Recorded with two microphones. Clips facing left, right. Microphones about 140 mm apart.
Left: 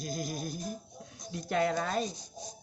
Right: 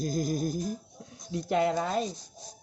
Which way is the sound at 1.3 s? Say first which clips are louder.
Right 3 dB; 25° right (ahead or behind).